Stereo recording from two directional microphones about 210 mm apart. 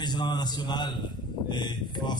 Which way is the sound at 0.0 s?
20° left (ahead or behind).